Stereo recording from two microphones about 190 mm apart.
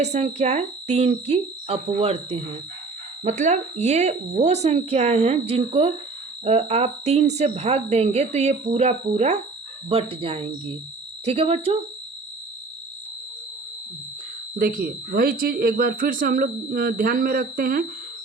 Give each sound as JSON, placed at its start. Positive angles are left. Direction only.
{"t": 0.0, "sound": "a woman's voice", "side_deg": -35}
{"t": 14.5, "sound": "speech", "side_deg": -50}